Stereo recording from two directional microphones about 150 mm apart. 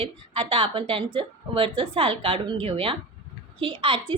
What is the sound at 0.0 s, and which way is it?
A woman's voice, 35° right (ahead or behind).